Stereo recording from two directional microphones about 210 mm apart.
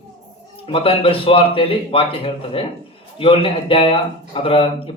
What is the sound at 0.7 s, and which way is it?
Speech, 25° left (ahead or behind).